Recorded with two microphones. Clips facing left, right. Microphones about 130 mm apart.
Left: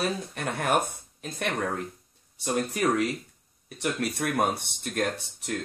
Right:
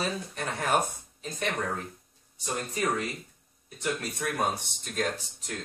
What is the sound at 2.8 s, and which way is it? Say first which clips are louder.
Speech: left 3 dB; 70° left (ahead or behind).